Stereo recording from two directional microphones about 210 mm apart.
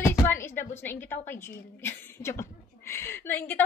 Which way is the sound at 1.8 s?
10° left (ahead or behind).